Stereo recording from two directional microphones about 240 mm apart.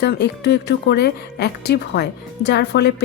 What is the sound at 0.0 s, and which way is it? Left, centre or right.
Speech, left.